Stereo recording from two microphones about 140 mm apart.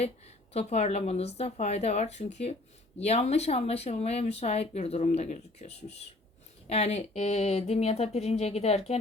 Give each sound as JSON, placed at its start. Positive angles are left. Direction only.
{"t": 0.5, "sound": "speech", "side_deg": 50}